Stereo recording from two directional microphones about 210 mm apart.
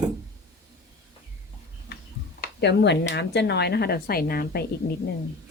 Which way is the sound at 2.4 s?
55° left (ahead or behind).